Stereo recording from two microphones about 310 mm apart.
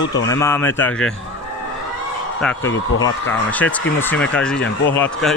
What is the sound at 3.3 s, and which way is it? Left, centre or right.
Speech, centre.